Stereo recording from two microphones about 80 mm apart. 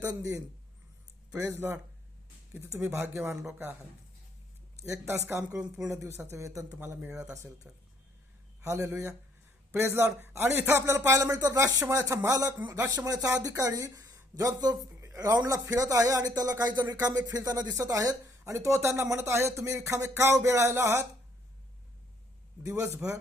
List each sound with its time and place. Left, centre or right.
1.3 s speech: right
5.4 s a woman's voice: centre
5.9 s speech: right
6.7 s speech: right
8.6 s speech: right
12.7 s speech: right
13.1 s speech: right
22.6 s speech: right